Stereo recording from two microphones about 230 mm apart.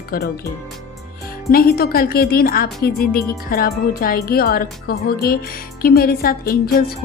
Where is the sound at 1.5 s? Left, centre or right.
Left.